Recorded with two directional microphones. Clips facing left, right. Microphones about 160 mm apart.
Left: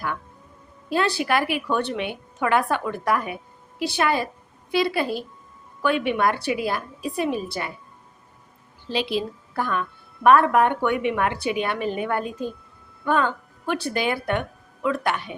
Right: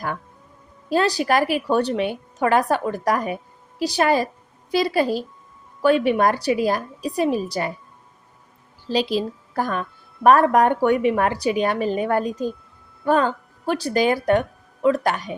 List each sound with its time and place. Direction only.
0.9 s a woman's voice: 40° right (ahead or behind)
8.9 s a woman's voice: 40° right (ahead or behind)